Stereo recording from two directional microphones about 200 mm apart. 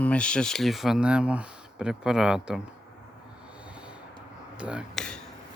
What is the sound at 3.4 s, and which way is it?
Snort, 5° right (ahead or behind).